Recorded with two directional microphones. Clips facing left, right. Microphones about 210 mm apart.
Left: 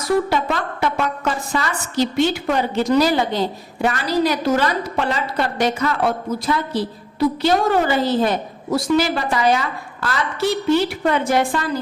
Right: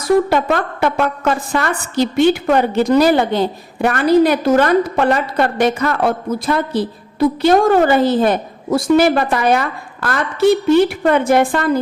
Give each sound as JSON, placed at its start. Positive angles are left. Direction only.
{"t": 0.3, "sound": "a woman's voice", "side_deg": -55}